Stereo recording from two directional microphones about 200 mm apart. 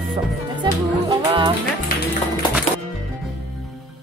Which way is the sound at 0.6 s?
25° right (ahead or behind).